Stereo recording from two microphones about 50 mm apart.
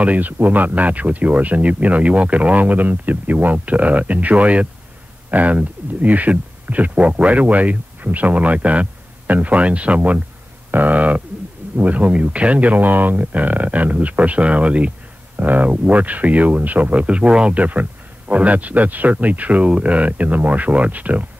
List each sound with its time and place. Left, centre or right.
0.0 s speech: right